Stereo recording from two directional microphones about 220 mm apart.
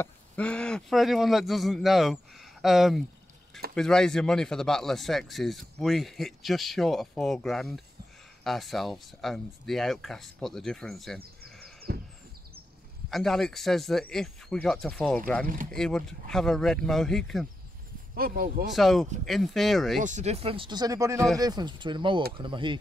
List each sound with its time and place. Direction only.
0.0 s speech: 5° left (ahead or behind)
13.1 s speech: centre (ahead or behind)
15.4 s speech: 40° right (ahead or behind)
15.7 s speech: centre (ahead or behind)
18.1 s speech: 40° right (ahead or behind)
18.7 s speech: centre (ahead or behind)
20.0 s speech: 35° right (ahead or behind)